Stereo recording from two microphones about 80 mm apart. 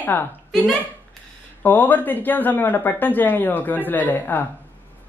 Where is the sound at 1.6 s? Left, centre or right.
Left.